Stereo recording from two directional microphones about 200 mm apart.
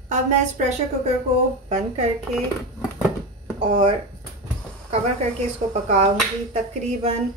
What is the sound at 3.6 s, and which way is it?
Speech, 25° right (ahead or behind).